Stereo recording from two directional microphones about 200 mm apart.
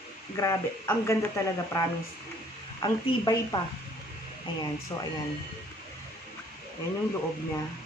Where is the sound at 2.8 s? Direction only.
20° left (ahead or behind).